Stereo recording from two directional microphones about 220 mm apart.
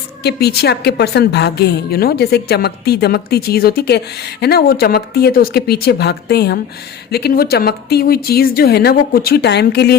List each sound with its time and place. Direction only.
0.2 s a woman's voice: 50° left (ahead or behind)